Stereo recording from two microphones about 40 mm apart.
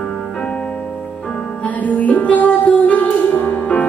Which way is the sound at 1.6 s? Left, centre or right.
Left.